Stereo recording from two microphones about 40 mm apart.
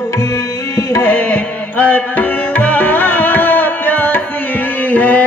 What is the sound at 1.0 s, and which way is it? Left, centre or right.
Music, left.